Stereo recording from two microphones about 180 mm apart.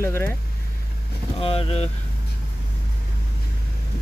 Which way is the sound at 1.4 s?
30° left (ahead or behind).